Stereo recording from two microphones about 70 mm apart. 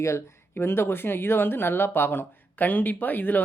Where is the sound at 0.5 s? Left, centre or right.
Left.